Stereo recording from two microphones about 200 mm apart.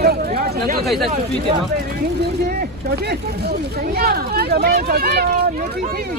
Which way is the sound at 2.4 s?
50° right (ahead or behind).